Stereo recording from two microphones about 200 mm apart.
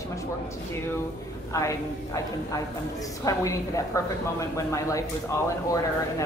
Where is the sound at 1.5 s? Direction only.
15° left (ahead or behind).